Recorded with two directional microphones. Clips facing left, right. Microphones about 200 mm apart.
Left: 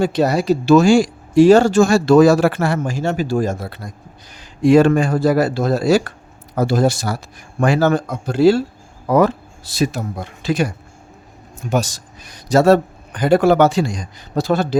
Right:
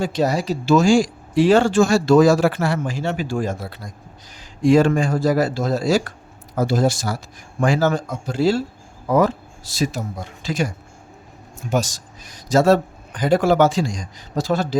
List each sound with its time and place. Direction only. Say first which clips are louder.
0.0 s a man's voice: left 4 dB; 60° left (ahead or behind)
1.4 s a man's voice: left 5 dB; 40° left (ahead or behind); by 14.8 s 60° left (ahead or behind)